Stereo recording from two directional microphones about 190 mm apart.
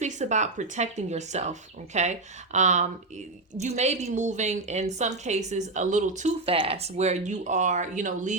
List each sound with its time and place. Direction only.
0.0 s a woman's voice: 40° right (ahead or behind)